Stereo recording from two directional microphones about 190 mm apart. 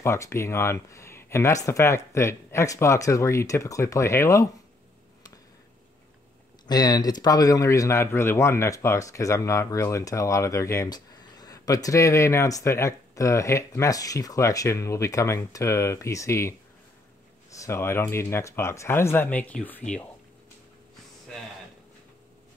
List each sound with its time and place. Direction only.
0.0 s speech: 15° left (ahead or behind)
6.7 s speech: 20° left (ahead or behind)